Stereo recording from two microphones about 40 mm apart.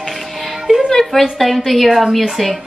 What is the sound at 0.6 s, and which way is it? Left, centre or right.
Music, centre.